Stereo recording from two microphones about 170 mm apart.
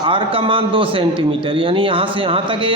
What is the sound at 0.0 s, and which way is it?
A man's voice, 30° right (ahead or behind).